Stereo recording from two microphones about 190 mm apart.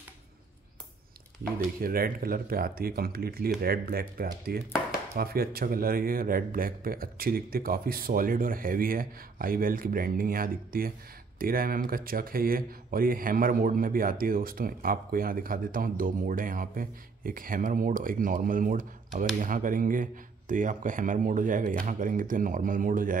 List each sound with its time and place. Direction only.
1.6 s speech: 50° right (ahead or behind)